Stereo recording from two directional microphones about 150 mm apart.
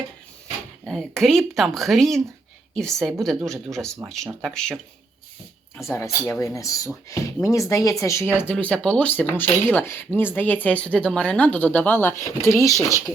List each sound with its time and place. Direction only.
0.9 s speech: centre (ahead or behind)
4.3 s speech: 10° right (ahead or behind)
4.5 s speech: 5° left (ahead or behind)
5.7 s speech: 15° left (ahead or behind)